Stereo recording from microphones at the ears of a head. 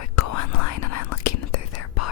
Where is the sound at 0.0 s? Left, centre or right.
Left.